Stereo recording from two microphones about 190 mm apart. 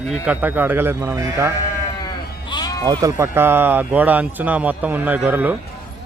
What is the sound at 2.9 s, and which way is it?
Speech, 20° right (ahead or behind).